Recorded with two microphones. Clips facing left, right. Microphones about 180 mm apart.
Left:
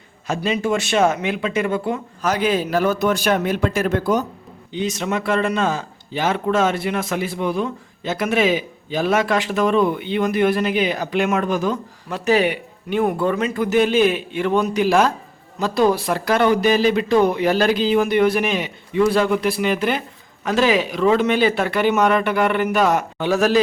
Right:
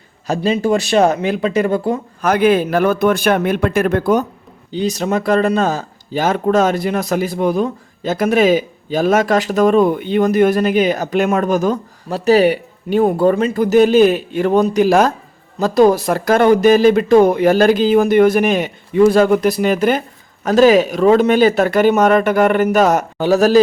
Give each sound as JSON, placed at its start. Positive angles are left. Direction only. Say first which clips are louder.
{"t": 0.3, "sound": "speech", "louder": "right 5 dB", "side_deg": -35}
{"t": 2.2, "sound": "a man's voice", "louder": "right 7 dB", "side_deg": -55}
{"t": 4.7, "sound": "speech", "louder": "right 5 dB", "side_deg": -35}